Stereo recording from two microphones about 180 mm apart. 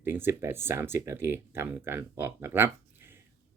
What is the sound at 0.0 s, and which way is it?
Speech, 10° right (ahead or behind).